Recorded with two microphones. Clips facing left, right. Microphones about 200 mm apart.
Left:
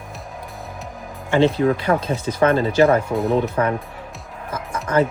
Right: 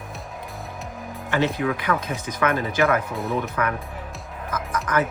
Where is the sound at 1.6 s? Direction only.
35° left (ahead or behind).